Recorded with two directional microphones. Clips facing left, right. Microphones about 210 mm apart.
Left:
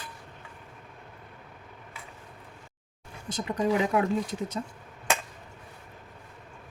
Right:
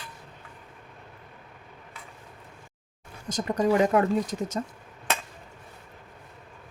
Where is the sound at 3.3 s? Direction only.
45° right (ahead or behind).